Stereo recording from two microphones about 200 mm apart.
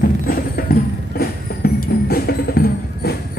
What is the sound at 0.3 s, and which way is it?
Music, 50° left (ahead or behind).